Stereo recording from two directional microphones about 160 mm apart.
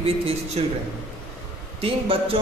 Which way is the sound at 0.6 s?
40° right (ahead or behind).